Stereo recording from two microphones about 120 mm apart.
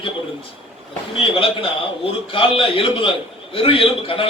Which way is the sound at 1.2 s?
50° left (ahead or behind).